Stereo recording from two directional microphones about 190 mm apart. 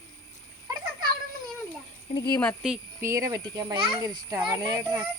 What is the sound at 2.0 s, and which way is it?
Speech, 25° left (ahead or behind).